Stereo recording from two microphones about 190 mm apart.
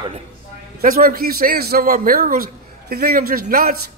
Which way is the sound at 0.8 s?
50° right (ahead or behind).